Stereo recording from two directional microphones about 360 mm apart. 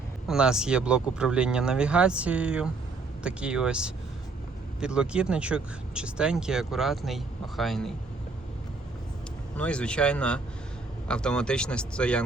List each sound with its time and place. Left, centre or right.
0.3 s speech: centre
9.6 s speech: centre